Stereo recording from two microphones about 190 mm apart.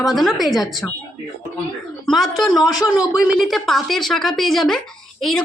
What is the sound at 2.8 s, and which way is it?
Speech, 15° left (ahead or behind).